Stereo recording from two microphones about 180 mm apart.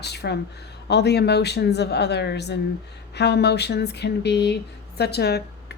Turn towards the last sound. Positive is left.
turn(degrees=65)  # may be behind; listen again after turning